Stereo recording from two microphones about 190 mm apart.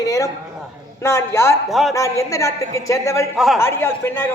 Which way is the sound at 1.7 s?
Centre (ahead or behind).